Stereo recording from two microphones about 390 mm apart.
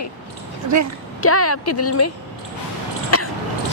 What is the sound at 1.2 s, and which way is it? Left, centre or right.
Speech, left.